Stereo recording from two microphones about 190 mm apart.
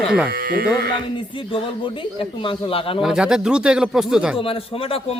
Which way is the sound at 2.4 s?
30° left (ahead or behind).